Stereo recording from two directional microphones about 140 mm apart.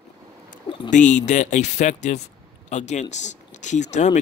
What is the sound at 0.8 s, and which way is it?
Speech, 60° left (ahead or behind).